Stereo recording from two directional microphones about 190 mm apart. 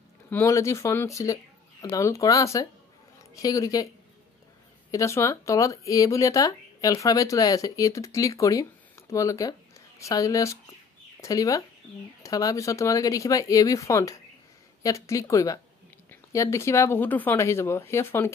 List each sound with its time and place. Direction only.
0.3 s speech: 15° left (ahead or behind)
4.9 s speech: 15° left (ahead or behind)